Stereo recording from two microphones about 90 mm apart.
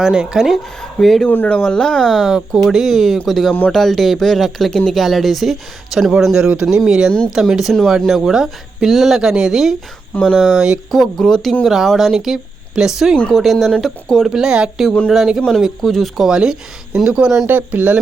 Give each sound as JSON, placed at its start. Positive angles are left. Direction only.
{"t": 0.0, "sound": "speech", "side_deg": -10}
{"t": 0.8, "sound": "speech", "side_deg": 5}
{"t": 1.3, "sound": "speech", "side_deg": 20}
{"t": 10.4, "sound": "speech", "side_deg": -10}
{"t": 10.9, "sound": "speech", "side_deg": 5}
{"t": 13.1, "sound": "speech", "side_deg": 10}
{"t": 14.8, "sound": "speech", "side_deg": 10}
{"t": 15.1, "sound": "speech", "side_deg": 0}